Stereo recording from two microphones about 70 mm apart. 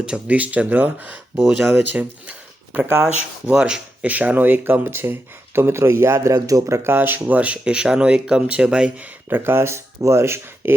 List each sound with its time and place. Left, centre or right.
0.0 s speech: centre
1.4 s speech: centre
1.6 s speech: right
6.3 s speech: right
6.9 s speech: right
7.3 s speech: right
9.0 s speech: right